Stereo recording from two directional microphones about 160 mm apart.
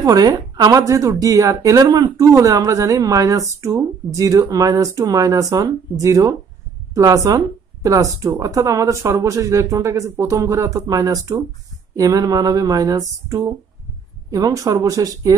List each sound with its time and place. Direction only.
0.0 s a woman's voice: 25° right (ahead or behind)